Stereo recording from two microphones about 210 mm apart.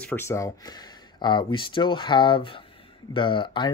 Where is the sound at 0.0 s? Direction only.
10° left (ahead or behind).